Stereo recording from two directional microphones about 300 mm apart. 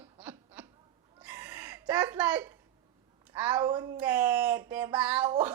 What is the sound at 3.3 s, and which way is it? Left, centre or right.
Speech, centre.